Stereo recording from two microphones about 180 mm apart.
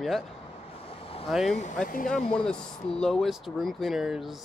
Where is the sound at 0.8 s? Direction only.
30° left (ahead or behind).